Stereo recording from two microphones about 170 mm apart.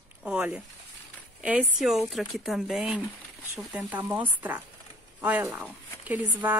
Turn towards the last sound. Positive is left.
turn(degrees=-10)  # may be behind; listen again after turning